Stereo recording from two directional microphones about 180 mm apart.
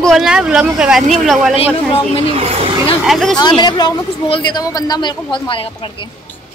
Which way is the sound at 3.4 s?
25° left (ahead or behind).